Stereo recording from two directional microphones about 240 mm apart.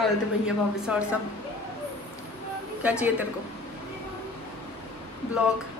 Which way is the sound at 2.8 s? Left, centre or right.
Centre.